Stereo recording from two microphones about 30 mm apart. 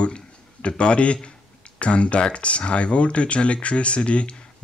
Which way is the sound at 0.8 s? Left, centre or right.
Left.